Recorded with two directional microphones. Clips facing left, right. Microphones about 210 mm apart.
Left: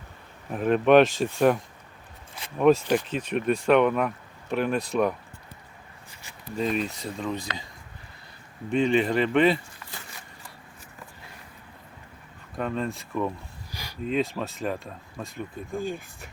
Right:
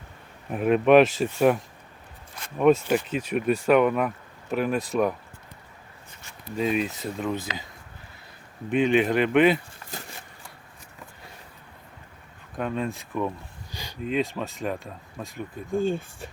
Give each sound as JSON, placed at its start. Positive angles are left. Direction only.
{"t": 0.5, "sound": "speech", "side_deg": -5}
{"t": 2.8, "sound": "speech", "side_deg": -5}
{"t": 6.6, "sound": "speech", "side_deg": -5}
{"t": 8.7, "sound": "speech", "side_deg": -5}
{"t": 9.8, "sound": "a sound", "side_deg": -40}
{"t": 12.5, "sound": "speech", "side_deg": -5}
{"t": 13.7, "sound": "a sound", "side_deg": -20}
{"t": 14.0, "sound": "speech", "side_deg": 0}
{"t": 15.8, "sound": "speech", "side_deg": -25}